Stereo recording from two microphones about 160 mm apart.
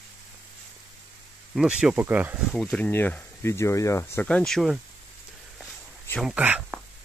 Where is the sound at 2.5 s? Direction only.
10° left (ahead or behind).